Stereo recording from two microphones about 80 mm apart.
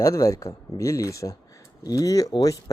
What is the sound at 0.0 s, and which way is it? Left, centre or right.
Speech, left.